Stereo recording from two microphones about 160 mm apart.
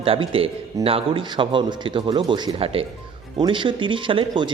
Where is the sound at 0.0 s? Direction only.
35° right (ahead or behind).